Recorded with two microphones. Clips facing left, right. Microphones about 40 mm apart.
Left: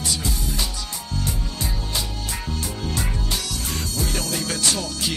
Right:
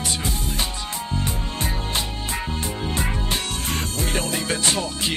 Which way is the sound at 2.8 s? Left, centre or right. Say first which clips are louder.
Right 2 dB; right.